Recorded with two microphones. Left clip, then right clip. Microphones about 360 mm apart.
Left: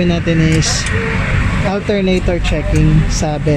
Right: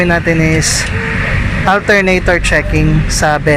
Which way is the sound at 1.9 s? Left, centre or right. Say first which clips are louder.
Right 6 dB; right.